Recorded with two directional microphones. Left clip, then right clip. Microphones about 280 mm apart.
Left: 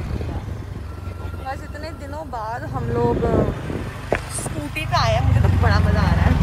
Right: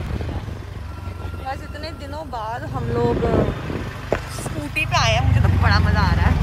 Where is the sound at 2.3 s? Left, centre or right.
Centre.